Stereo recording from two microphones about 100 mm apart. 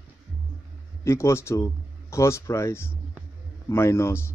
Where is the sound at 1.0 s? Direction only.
30° left (ahead or behind).